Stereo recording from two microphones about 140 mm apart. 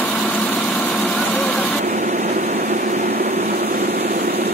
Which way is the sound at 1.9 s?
65° right (ahead or behind).